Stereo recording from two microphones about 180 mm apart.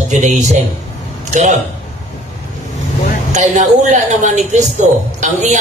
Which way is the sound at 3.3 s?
40° right (ahead or behind).